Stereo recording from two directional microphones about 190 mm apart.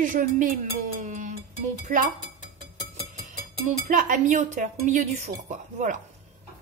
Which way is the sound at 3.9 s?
40° right (ahead or behind).